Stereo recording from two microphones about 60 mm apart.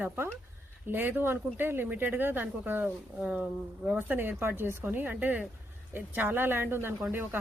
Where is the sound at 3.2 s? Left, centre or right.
Centre.